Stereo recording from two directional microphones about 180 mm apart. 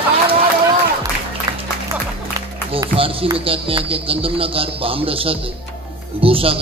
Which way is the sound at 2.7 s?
30° right (ahead or behind).